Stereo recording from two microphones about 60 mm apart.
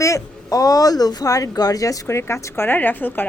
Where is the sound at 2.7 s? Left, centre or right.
Left.